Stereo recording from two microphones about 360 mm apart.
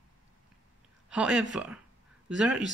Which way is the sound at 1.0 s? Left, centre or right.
Centre.